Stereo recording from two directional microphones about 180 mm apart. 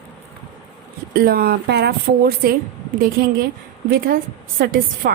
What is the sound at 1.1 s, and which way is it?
A woman's voice, 55° right (ahead or behind).